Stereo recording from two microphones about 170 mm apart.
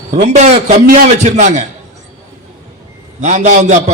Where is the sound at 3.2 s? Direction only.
45° right (ahead or behind).